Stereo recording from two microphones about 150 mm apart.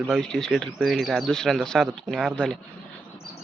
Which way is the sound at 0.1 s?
5° left (ahead or behind).